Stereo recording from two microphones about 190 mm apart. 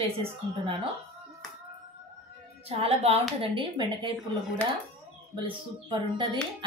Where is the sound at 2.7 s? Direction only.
30° right (ahead or behind).